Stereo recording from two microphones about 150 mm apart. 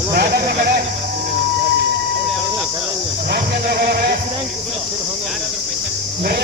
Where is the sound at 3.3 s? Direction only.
90° right.